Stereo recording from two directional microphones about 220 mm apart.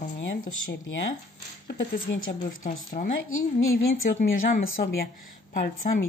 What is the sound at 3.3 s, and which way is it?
Speech, 65° left (ahead or behind).